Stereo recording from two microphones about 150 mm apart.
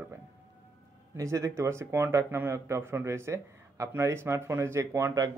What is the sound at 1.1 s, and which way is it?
Speech, 20° right (ahead or behind).